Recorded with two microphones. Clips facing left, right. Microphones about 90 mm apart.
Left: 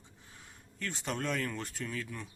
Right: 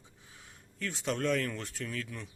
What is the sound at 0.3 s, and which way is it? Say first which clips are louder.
Speech: right 2 dB; centre (ahead or behind).